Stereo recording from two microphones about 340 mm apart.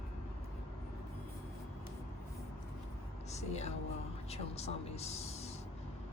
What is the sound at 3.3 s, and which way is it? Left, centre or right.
Music, centre.